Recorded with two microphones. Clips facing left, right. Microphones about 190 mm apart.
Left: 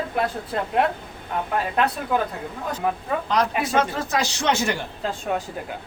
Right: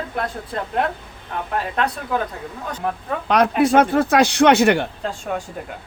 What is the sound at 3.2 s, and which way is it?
A man's voice, 65° right (ahead or behind).